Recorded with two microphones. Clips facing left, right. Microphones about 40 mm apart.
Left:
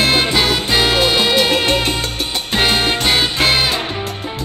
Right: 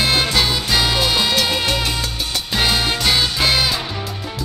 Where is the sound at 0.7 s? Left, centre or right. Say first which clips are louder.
Left 4 dB; left.